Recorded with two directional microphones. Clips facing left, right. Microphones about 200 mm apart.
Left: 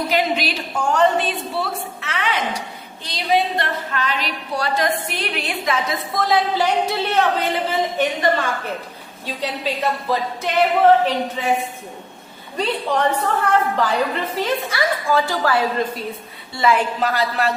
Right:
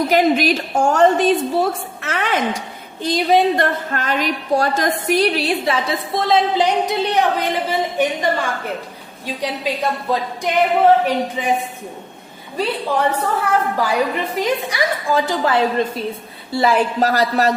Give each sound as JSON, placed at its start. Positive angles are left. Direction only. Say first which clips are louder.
{"t": 0.1, "sound": "a woman's voice", "louder": "right 7 dB", "side_deg": -45}
{"t": 12.5, "sound": "a woman's voice", "louder": "right 1 dB", "side_deg": -5}
{"t": 16.7, "sound": "a woman's voice", "louder": "right 4 dB", "side_deg": -40}